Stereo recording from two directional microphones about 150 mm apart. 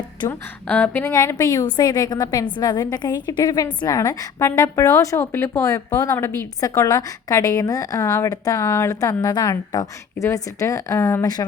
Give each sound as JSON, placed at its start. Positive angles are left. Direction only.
{"t": 0.3, "sound": "a woman's voice", "side_deg": 10}